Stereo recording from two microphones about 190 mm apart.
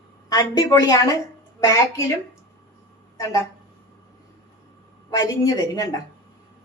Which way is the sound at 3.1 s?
15° left (ahead or behind).